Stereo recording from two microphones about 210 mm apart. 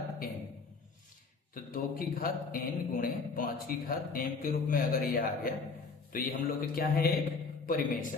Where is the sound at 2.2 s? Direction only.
40° left (ahead or behind).